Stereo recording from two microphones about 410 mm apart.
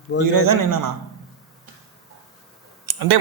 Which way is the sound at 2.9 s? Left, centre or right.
Right.